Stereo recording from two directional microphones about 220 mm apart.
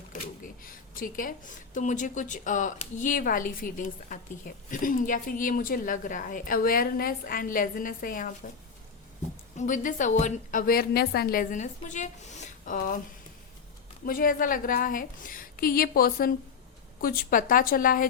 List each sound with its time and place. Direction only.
0.1 s speech: 40° left (ahead or behind)
9.6 s speech: 35° left (ahead or behind)
14.0 s speech: 40° left (ahead or behind)